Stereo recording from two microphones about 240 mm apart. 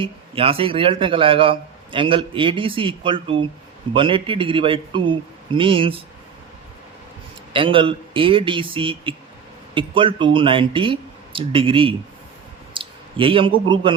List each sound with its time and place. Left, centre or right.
0.0 s speech: right
7.5 s speech: right
12.7 s a sound: right